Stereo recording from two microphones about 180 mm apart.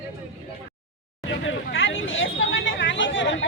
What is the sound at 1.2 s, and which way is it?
Hubbub, 90° left.